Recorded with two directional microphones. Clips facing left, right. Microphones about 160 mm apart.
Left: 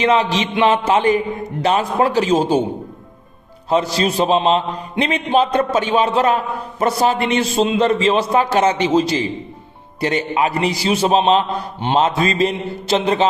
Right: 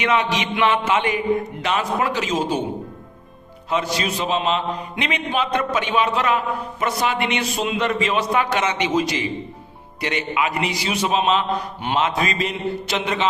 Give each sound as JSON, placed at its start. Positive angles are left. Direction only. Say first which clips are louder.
{"t": 0.0, "sound": "a man's voice", "louder": "left 4 dB", "side_deg": 30}
{"t": 3.7, "sound": "a man's voice", "louder": "left 6 dB", "side_deg": 35}